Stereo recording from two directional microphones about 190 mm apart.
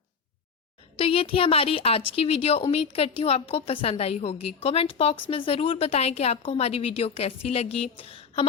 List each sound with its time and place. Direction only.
0.9 s a woman's voice: 30° left (ahead or behind)